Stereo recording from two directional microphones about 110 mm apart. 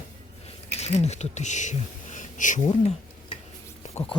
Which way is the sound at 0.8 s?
80° left.